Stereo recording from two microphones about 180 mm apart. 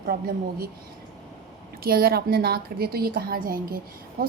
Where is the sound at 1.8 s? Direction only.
55° right (ahead or behind).